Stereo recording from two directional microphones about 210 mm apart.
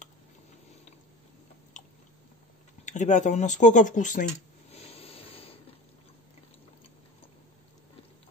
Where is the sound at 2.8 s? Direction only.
35° left (ahead or behind).